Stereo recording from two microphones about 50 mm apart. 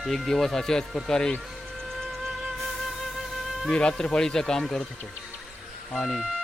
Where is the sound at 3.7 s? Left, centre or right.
Centre.